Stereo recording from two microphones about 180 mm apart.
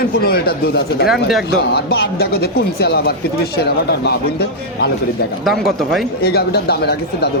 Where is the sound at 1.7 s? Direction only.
60° left (ahead or behind).